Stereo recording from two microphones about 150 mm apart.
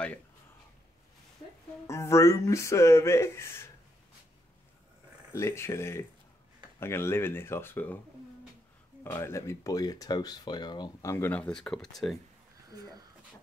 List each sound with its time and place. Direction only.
1.9 s speech: 20° left (ahead or behind)
5.3 s speech: 20° left (ahead or behind)
9.0 s speech: 15° left (ahead or behind)